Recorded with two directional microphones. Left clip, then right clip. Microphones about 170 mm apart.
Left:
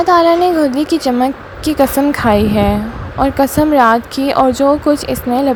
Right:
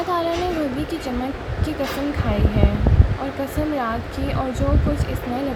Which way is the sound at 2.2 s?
65° left (ahead or behind).